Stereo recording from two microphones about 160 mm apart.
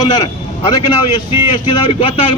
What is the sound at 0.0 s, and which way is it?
A man's voice, 25° left (ahead or behind).